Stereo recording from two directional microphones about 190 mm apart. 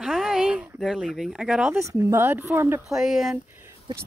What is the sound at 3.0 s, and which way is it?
Speech, centre (ahead or behind).